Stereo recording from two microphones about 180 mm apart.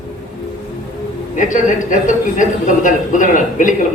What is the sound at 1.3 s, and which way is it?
A man's voice, 45° left (ahead or behind).